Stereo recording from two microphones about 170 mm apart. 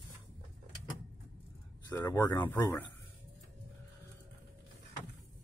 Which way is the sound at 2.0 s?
15° left (ahead or behind).